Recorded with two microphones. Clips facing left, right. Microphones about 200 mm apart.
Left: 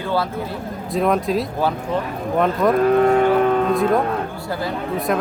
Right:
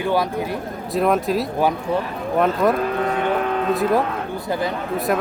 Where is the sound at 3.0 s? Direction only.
45° left (ahead or behind).